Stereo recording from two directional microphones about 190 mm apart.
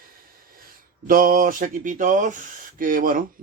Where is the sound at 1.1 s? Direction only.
45° right (ahead or behind).